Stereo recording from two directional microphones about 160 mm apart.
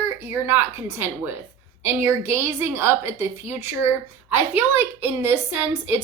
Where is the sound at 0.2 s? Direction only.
15° right (ahead or behind).